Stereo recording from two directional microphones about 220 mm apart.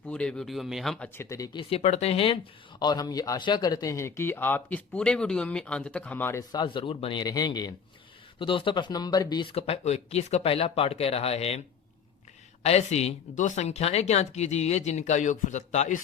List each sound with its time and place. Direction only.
0.1 s speech: 5° left (ahead or behind)
1.7 s speech: 30° left (ahead or behind)
12.6 s speech: 30° left (ahead or behind)